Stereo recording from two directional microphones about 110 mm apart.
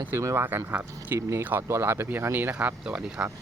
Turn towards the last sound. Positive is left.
turn(degrees=-10)  # may be behind; listen again after turning